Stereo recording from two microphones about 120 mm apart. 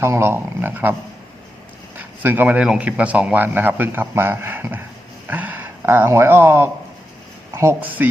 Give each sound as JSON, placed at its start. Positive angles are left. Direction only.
{"t": 0.0, "sound": "speech", "side_deg": -20}
{"t": 2.2, "sound": "a man's voice", "side_deg": -15}